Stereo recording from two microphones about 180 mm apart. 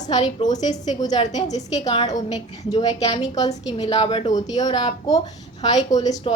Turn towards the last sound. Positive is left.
turn(degrees=20)  # may be behind; listen again after turning